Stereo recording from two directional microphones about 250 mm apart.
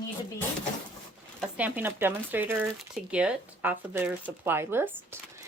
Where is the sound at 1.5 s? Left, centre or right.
Centre.